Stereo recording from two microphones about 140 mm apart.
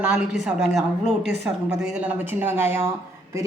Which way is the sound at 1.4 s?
20° right (ahead or behind).